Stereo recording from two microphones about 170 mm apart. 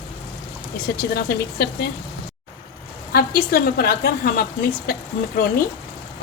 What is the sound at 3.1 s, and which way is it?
A woman's voice, 65° left (ahead or behind).